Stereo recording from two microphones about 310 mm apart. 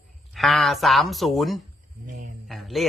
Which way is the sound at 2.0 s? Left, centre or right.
Right.